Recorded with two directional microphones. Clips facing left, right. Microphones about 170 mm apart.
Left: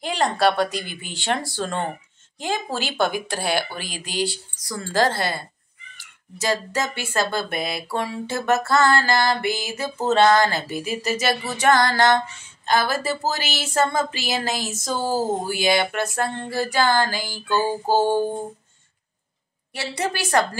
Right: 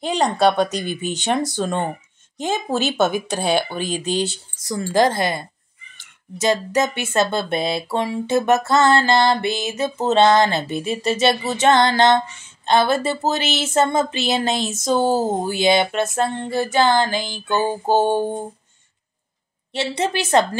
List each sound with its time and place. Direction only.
0.0 s speech: 20° right (ahead or behind)
19.7 s speech: 25° right (ahead or behind)